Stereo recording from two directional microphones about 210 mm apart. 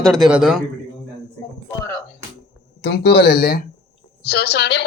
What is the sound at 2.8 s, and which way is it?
A woman's voice, 50° left (ahead or behind).